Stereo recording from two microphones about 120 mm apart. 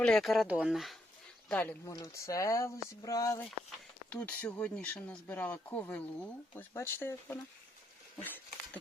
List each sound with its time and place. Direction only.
0.0 s speech: 5° left (ahead or behind)
1.5 s speech: 10° left (ahead or behind)
1.8 s speech: 30° left (ahead or behind)
4.1 s speech: 10° left (ahead or behind)